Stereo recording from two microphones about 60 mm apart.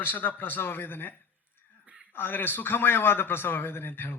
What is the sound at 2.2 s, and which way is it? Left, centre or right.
A man's voice, left.